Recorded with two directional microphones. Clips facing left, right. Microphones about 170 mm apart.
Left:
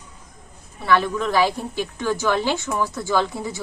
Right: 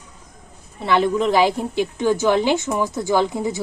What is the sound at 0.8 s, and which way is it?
A woman's voice, 20° right (ahead or behind).